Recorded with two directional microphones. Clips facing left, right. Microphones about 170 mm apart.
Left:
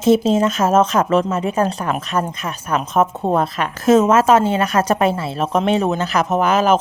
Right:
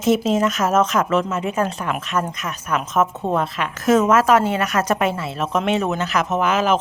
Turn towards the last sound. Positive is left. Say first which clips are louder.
# left 3 dB
turn(degrees=40)  # may be behind; listen again after turning